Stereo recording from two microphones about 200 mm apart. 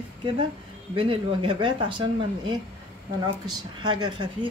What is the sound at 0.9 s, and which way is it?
Speech, 25° right (ahead or behind).